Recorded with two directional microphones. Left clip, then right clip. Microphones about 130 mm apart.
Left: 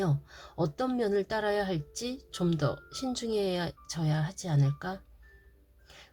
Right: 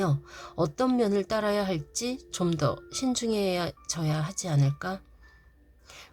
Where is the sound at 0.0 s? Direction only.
35° right (ahead or behind).